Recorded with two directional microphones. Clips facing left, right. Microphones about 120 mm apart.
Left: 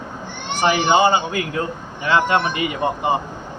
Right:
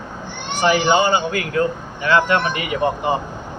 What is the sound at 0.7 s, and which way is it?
Speech, 25° left (ahead or behind).